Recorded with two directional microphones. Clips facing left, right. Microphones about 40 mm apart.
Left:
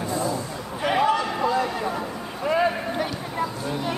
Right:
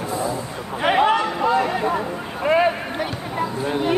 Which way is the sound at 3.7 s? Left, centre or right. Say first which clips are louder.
Right 6 dB; right.